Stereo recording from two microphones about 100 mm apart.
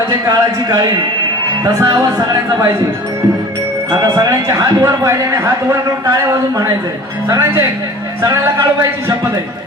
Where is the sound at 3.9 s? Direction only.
40° right (ahead or behind).